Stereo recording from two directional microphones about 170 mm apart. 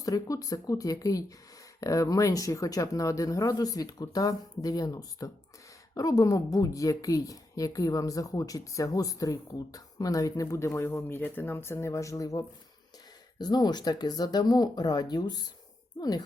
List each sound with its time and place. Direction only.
0.0 s a woman's voice: 20° left (ahead or behind)